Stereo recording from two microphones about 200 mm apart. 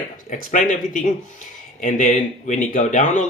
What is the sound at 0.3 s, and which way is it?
Speech, 40° left (ahead or behind).